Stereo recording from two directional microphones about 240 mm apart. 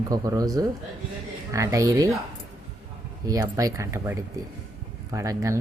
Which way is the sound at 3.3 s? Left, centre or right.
Centre.